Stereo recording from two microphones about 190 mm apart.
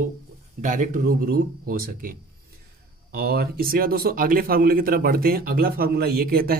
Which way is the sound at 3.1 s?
55° right (ahead or behind).